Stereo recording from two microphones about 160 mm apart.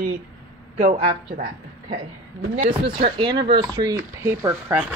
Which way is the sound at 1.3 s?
65° right (ahead or behind).